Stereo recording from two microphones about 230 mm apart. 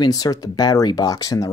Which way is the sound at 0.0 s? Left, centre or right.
Centre.